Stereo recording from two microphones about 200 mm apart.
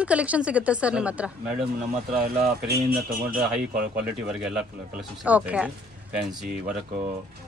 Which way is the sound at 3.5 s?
5° right (ahead or behind).